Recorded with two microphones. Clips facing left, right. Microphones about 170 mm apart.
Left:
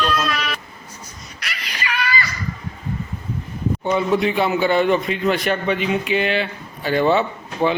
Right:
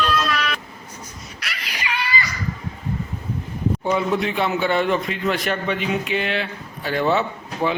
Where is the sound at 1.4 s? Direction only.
5° right (ahead or behind).